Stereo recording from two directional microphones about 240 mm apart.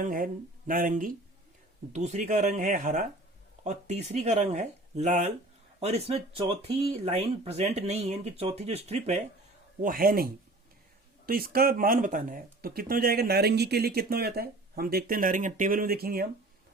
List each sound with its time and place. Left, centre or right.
0.0 s speech: right
9.8 s speech: right